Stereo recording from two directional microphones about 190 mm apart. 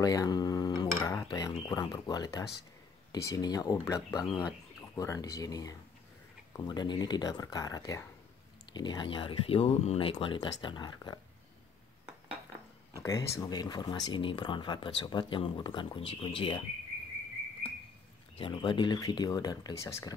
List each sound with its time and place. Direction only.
0.0 s cutlery: 20° left (ahead or behind)
1.3 s speech: 20° left (ahead or behind)
12.9 s speech: 15° left (ahead or behind)
18.4 s speech: 25° left (ahead or behind)